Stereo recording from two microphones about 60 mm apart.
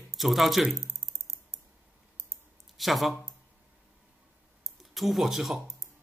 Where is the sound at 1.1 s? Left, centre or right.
Right.